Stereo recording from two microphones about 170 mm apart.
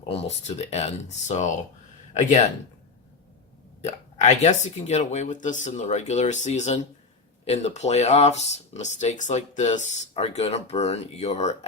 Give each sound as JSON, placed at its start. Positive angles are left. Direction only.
{"t": 0.0, "sound": "speech", "side_deg": 35}
{"t": 3.8, "sound": "speech", "side_deg": 45}